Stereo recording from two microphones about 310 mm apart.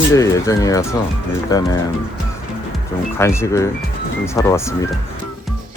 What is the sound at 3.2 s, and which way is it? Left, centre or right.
Speech, centre.